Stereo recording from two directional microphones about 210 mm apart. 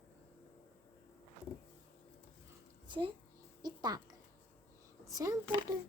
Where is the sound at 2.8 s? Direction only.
20° right (ahead or behind).